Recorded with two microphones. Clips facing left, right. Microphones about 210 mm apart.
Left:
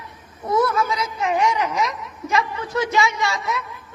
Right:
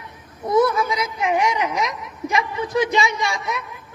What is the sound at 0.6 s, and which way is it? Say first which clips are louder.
A woman's voice: right 1 dB; 15° right (ahead or behind).